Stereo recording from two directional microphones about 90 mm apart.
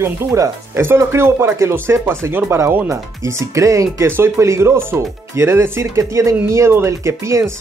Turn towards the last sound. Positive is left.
turn(degrees=-30)  # may be behind; listen again after turning